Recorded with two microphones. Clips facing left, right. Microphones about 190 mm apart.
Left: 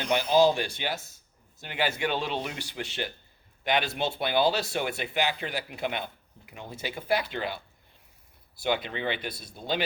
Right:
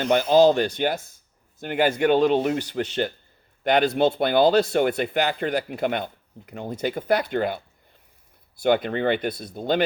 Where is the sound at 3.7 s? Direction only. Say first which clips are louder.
Right 9 dB; 50° right (ahead or behind).